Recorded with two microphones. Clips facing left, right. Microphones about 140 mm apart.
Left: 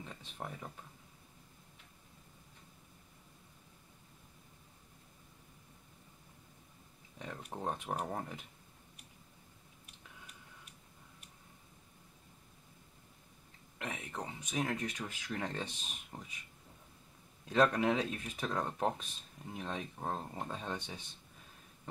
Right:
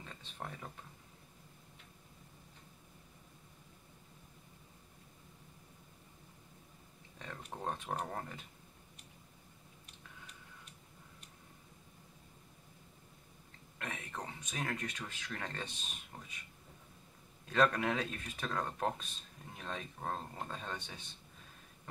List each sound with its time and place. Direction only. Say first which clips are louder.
0.0 s speech: left 2 dB; 10° left (ahead or behind)
7.2 s speech: left 2 dB; 15° left (ahead or behind)
13.7 s speech: left 2 dB; 15° left (ahead or behind)
17.5 s speech: left 2 dB; 15° left (ahead or behind)